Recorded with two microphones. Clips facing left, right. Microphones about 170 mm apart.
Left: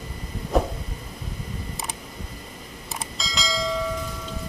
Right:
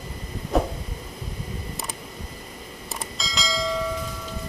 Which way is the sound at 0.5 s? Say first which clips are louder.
Even; centre (ahead or behind).